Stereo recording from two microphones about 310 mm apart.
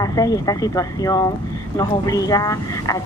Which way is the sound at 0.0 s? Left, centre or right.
Centre.